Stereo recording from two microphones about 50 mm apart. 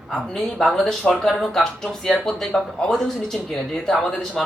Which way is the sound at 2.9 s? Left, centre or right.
Centre.